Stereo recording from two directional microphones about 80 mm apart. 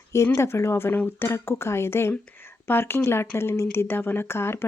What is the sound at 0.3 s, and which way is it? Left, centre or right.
Speech, left.